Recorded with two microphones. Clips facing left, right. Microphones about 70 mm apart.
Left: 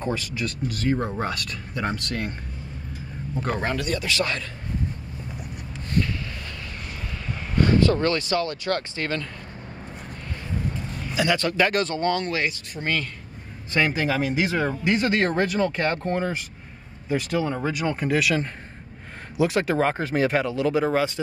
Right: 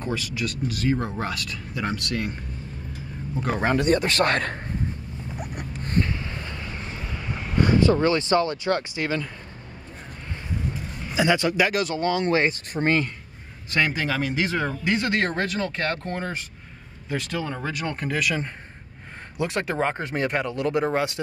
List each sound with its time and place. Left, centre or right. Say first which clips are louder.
0.0 s speech: left 1 dB; centre
0.9 s speech: left 1 dB; centre
3.3 s speech: even; centre
3.6 s a man's voice: right 5 dB; right
5.4 s zipper: right 4 dB; right
5.9 s a sound: even; right
7.1 s speech: right 1 dB; centre
11.1 s speech: right 1 dB; centre
12.3 s a man's voice: right 5 dB; right
13.7 s speech: left 1 dB; centre
15.3 s speech: left 4 dB; centre